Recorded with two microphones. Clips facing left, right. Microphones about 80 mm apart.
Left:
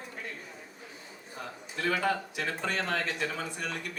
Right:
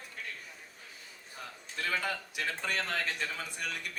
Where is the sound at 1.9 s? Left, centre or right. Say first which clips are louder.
Left 6 dB; left.